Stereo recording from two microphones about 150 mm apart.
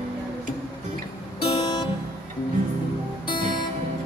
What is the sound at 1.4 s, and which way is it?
Music, 30° left (ahead or behind).